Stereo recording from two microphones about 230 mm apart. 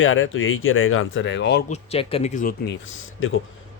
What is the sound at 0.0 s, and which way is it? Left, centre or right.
Speech, left.